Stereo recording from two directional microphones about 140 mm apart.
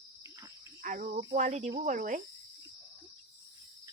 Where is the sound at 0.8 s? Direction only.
75° right (ahead or behind).